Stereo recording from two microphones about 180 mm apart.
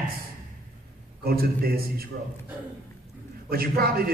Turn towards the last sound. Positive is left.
turn(degrees=-55)  # may be behind; listen again after turning